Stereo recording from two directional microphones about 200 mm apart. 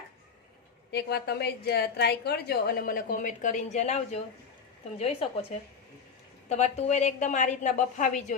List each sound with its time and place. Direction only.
0.9 s a woman's voice: 55° left (ahead or behind); by 8.4 s 40° left (ahead or behind)